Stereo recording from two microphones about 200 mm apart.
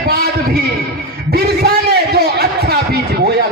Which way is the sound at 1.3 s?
50° right (ahead or behind).